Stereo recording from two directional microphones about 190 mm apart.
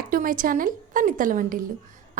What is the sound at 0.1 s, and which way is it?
A woman's voice, 45° right (ahead or behind).